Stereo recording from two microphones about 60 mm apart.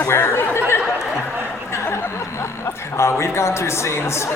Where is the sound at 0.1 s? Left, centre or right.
Left.